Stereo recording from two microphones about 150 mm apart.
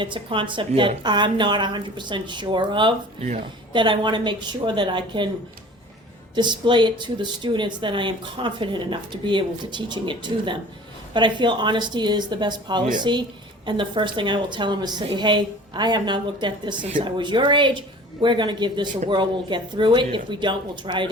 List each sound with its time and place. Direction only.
0.0 s speech: 35° right (ahead or behind)
6.3 s speech: 30° right (ahead or behind)